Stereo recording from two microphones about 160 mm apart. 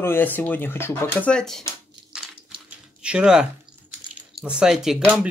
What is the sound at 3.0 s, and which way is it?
Speech, 5° right (ahead or behind).